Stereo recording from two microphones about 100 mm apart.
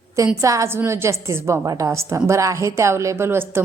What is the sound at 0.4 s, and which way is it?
A woman's voice, 30° right (ahead or behind).